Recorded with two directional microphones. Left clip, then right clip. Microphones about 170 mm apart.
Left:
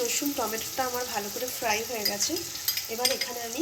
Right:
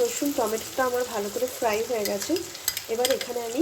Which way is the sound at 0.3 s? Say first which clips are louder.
Right 4 dB; 30° right (ahead or behind).